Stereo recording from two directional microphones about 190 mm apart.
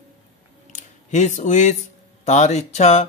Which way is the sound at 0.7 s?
40° left (ahead or behind).